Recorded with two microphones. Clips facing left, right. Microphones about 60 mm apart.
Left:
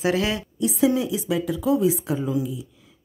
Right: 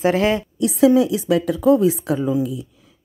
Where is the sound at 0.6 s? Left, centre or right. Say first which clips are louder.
Right 6 dB; right.